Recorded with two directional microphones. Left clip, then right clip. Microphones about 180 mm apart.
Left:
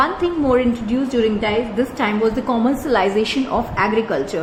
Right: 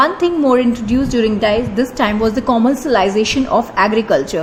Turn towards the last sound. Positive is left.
turn(degrees=-40)  # may be behind; listen again after turning